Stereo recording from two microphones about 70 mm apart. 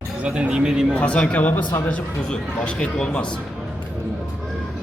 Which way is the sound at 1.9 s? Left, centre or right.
Centre.